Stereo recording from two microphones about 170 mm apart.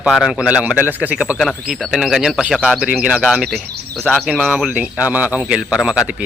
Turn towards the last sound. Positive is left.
turn(degrees=-5)  # may be behind; listen again after turning